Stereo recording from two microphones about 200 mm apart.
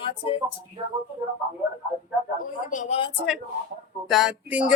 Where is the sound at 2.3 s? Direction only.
40° left (ahead or behind).